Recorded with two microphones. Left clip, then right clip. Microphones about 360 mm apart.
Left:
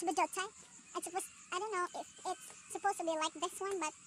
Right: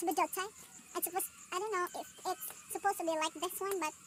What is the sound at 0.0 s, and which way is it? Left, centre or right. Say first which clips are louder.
A child's voice: right 1 dB; left.